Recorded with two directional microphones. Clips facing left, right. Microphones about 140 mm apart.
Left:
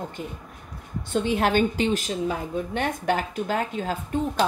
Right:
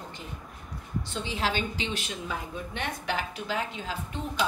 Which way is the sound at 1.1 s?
55° left (ahead or behind).